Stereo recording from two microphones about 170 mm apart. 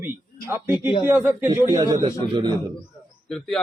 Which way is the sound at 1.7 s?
20° right (ahead or behind).